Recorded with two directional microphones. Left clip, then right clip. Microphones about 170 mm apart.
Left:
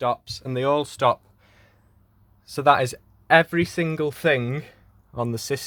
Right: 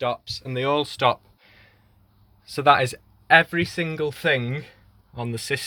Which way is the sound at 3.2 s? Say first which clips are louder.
Right 1 dB; 35° left (ahead or behind).